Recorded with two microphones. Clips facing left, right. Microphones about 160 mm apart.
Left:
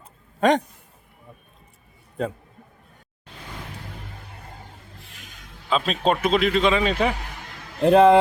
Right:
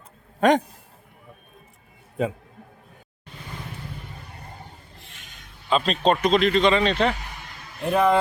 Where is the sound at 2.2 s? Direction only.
5° right (ahead or behind).